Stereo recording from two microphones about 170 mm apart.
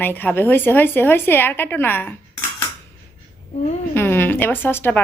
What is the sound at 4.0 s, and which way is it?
A woman's voice, 15° left (ahead or behind).